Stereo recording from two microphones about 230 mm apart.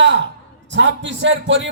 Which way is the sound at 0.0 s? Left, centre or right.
Right.